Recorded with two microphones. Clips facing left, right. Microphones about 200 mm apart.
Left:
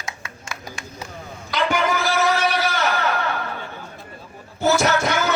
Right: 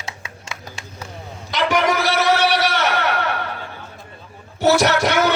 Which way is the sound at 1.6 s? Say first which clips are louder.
Right 3 dB; 75° right (ahead or behind).